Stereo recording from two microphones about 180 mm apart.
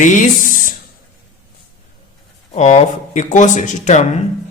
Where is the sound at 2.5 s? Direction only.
40° left (ahead or behind).